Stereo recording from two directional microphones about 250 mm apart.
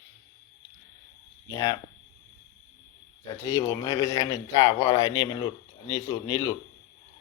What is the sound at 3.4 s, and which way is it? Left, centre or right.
Speech, centre.